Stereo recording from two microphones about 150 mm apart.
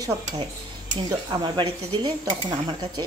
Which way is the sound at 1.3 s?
30° right (ahead or behind).